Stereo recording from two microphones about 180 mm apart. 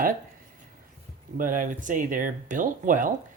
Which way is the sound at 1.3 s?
50° right (ahead or behind).